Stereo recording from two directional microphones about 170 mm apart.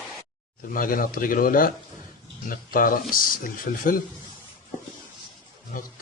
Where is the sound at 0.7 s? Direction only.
55° left (ahead or behind).